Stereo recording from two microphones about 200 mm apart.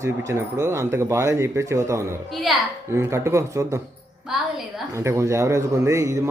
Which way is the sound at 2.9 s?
15° right (ahead or behind).